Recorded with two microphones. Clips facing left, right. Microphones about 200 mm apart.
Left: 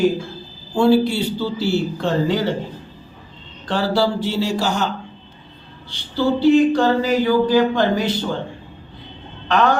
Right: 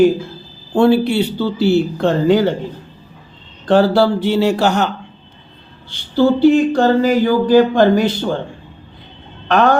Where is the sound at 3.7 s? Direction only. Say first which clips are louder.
Right 7 dB; 55° right (ahead or behind).